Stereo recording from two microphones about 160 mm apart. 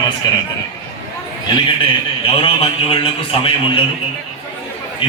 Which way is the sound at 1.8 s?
35° left (ahead or behind).